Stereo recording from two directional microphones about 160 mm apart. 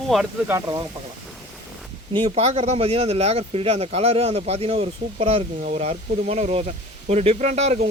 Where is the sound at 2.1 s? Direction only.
35° right (ahead or behind).